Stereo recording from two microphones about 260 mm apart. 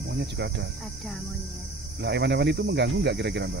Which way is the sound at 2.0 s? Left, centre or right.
Right.